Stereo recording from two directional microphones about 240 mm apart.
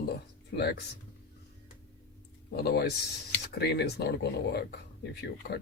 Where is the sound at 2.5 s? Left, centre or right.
Left.